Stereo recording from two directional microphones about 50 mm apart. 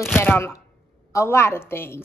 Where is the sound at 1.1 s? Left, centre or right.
Left.